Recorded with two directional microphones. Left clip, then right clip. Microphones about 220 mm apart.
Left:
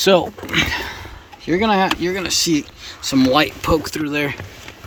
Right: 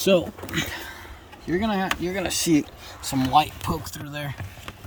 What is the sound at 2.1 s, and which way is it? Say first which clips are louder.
Speech: left 4 dB; 10° right (ahead or behind).